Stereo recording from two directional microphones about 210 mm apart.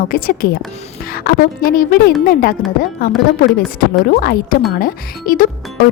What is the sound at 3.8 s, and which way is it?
A woman's voice, 45° left (ahead or behind).